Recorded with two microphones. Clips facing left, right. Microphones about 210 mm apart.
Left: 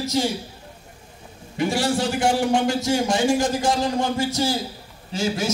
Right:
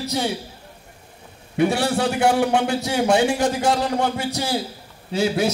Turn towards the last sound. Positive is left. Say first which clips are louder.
# right 4 dB
turn(degrees=-60)  # may be behind; listen again after turning